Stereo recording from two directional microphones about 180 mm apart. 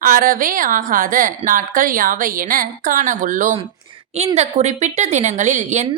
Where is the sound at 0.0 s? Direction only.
50° right (ahead or behind).